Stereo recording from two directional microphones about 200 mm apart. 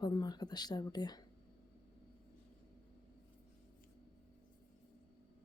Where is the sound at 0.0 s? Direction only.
20° left (ahead or behind).